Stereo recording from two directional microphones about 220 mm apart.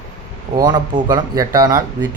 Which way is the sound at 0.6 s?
20° right (ahead or behind).